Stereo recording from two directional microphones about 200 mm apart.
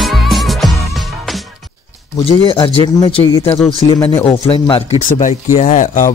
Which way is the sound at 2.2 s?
25° left (ahead or behind).